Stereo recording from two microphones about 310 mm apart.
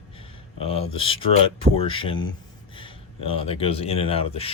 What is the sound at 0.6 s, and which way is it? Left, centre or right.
Speech, centre.